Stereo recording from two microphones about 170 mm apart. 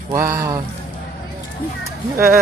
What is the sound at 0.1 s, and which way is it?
Speech, 15° right (ahead or behind).